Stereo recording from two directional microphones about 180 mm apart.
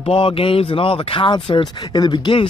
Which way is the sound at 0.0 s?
30° left (ahead or behind).